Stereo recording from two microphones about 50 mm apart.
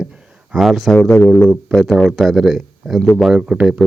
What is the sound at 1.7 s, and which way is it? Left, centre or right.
Speech, left.